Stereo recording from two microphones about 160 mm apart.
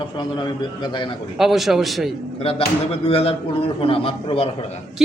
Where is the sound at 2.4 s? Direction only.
35° left (ahead or behind).